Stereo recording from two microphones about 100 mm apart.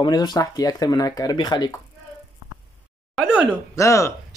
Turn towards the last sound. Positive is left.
turn(degrees=30)  # may be behind; listen again after turning